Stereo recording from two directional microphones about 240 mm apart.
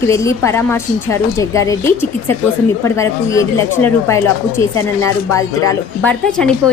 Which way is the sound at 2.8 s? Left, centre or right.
Centre.